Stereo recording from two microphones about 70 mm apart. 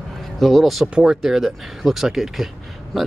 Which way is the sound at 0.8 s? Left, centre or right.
Centre.